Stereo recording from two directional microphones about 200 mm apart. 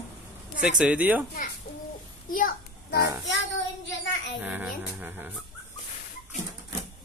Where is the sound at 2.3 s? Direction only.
45° left (ahead or behind).